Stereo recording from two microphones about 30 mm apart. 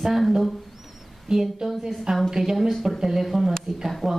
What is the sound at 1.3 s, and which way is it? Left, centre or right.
A woman's voice, centre.